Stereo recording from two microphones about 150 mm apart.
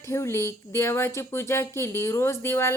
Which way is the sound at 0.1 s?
20° left (ahead or behind).